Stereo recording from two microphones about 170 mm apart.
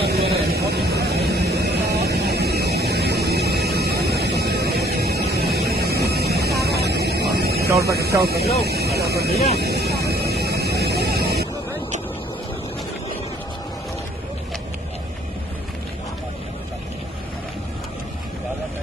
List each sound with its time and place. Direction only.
0.0 s vehicle: 70° right (ahead or behind)